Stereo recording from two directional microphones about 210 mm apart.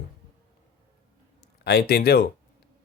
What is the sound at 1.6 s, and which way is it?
Speech, 50° left (ahead or behind).